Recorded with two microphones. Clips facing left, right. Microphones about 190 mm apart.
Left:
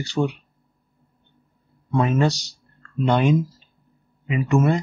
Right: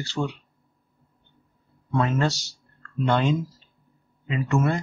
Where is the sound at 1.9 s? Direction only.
15° left (ahead or behind).